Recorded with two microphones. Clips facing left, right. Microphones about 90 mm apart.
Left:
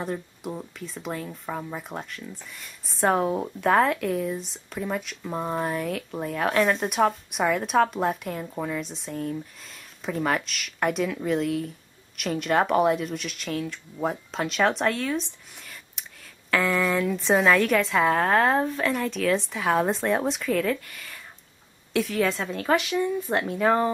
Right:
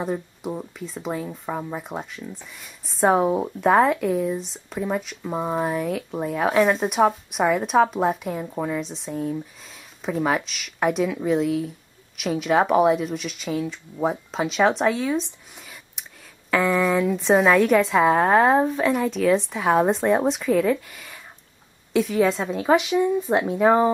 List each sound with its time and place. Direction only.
0.0 s speech: 10° right (ahead or behind)
8.8 s speech: centre (ahead or behind)